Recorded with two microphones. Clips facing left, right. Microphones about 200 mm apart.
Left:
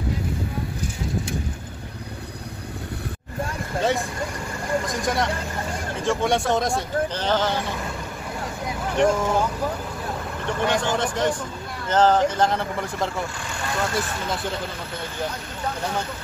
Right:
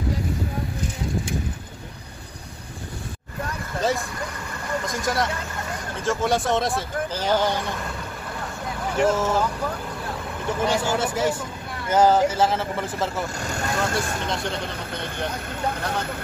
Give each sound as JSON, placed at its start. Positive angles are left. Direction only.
{"t": 4.8, "sound": "speech", "side_deg": 0}
{"t": 8.9, "sound": "speech", "side_deg": -5}
{"t": 10.4, "sound": "speech", "side_deg": -5}
{"t": 13.4, "sound": "speech", "side_deg": -40}
{"t": 13.9, "sound": "speech", "side_deg": 5}